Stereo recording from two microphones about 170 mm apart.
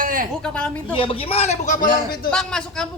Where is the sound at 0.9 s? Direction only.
30° left (ahead or behind); by 2.3 s 55° left (ahead or behind).